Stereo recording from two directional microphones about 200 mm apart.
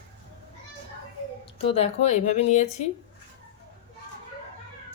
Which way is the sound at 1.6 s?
30° left (ahead or behind).